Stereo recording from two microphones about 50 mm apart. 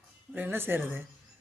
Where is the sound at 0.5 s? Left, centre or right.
Right.